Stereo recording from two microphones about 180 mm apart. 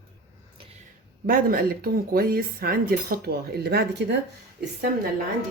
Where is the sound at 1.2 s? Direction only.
50° right (ahead or behind); by 4.1 s 70° right (ahead or behind).